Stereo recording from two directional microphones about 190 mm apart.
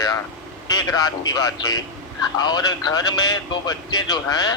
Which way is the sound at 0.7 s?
20° left (ahead or behind).